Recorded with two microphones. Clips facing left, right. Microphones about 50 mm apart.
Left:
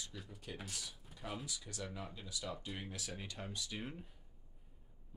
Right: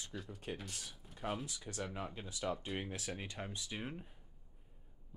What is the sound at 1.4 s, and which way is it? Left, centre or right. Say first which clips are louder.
Speech: right 3 dB; right.